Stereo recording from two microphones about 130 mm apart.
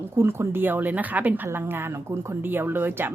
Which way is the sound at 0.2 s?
20° right (ahead or behind).